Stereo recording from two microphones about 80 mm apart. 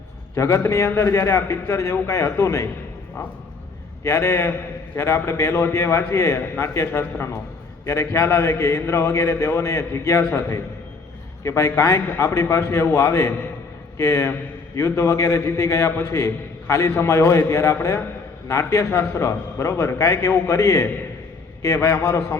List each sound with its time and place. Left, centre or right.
0.3 s a man's voice: left
4.0 s a man's voice: left